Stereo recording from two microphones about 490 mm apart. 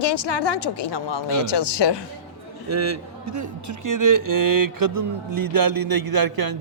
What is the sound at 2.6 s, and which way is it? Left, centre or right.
A man's voice, right.